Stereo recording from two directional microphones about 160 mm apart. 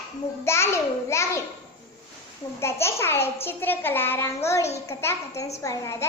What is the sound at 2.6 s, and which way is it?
A child's voice, 15° left (ahead or behind).